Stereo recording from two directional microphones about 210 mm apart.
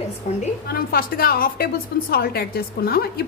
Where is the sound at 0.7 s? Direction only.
45° left (ahead or behind).